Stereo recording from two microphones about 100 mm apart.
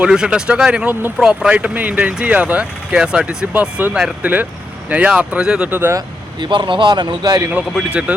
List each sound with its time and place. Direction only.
0.0 s speech: 10° right (ahead or behind)
5.6 s speech: 20° right (ahead or behind)
6.4 s speech: 50° right (ahead or behind)